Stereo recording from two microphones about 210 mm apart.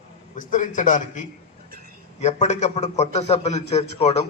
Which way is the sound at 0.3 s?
40° left (ahead or behind).